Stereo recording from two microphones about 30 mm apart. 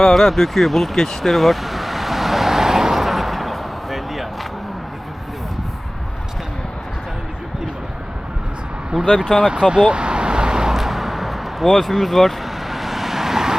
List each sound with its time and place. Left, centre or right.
0.0 s vehicle: centre
8.9 s speech: right
9.5 s vehicle: right
10.8 s vehicle: centre